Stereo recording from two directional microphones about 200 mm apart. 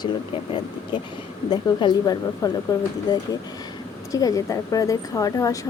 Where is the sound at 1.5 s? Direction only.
20° left (ahead or behind).